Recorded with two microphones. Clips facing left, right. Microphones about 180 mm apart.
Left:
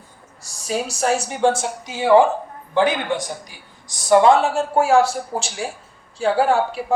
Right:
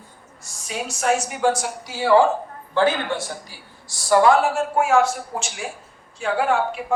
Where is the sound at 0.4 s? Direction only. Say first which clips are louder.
Left 6 dB; 35° left (ahead or behind).